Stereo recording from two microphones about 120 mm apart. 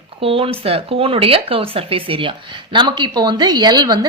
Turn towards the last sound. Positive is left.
turn(degrees=-35)  # may be behind; listen again after turning